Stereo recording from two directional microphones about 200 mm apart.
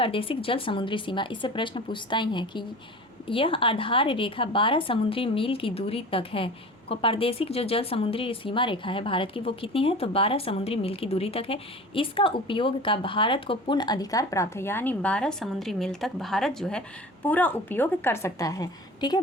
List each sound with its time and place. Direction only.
0.0 s a woman's voice: 25° left (ahead or behind)